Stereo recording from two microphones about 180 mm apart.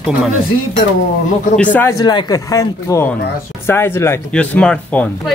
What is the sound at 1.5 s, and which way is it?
Speech, 10° left (ahead or behind).